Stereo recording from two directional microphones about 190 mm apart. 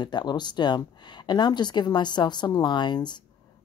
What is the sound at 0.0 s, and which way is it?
Speech, 25° left (ahead or behind).